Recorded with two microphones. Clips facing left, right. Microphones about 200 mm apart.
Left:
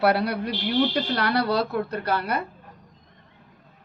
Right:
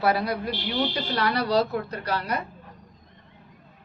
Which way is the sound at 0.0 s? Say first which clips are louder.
Left 2 dB; 70° left (ahead or behind).